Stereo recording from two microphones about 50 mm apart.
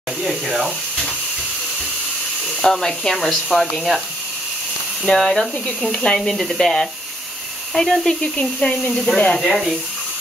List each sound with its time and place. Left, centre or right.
0.2 s speech: centre
2.6 s speech: centre
5.0 s speech: centre
5.8 s speech: centre
6.1 s speech: centre
8.2 s speech: centre
9.4 s speech: centre